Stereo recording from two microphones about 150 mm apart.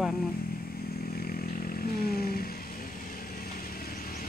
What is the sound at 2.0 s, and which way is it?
Vehicle, 90° left.